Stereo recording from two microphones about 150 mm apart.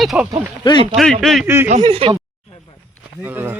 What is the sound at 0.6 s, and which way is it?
Speech, 30° left (ahead or behind).